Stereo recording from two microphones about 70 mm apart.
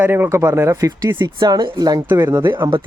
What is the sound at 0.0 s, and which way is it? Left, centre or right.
Speech, right.